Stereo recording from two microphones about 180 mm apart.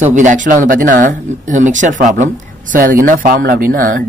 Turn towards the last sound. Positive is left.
turn(degrees=-50)  # may be behind; listen again after turning